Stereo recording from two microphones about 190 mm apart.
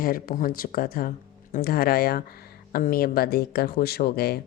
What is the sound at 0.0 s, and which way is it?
Speech, 50° left (ahead or behind).